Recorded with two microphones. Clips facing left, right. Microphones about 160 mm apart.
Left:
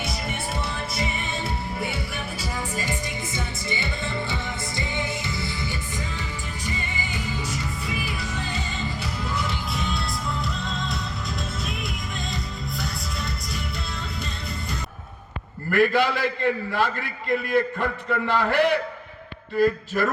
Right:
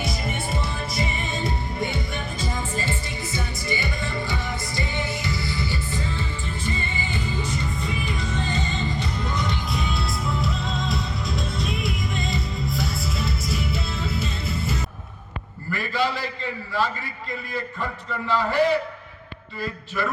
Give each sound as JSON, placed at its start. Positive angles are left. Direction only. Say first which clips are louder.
{"t": 0.0, "sound": "music", "louder": "right 2 dB", "side_deg": 0}
{"t": 15.7, "sound": "a man's voice", "louder": "left 5 dB", "side_deg": 55}
{"t": 19.5, "sound": "a man's voice", "louder": "left 8 dB", "side_deg": 50}